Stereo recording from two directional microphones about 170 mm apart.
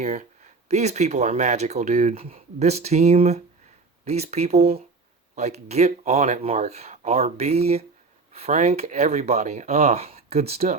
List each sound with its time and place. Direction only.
0.0 s speech: 45° right (ahead or behind)